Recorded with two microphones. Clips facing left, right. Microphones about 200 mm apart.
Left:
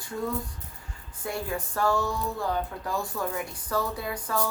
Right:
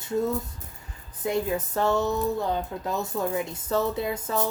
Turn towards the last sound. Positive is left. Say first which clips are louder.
# right 3 dB
turn(degrees=-25)  # may be behind; listen again after turning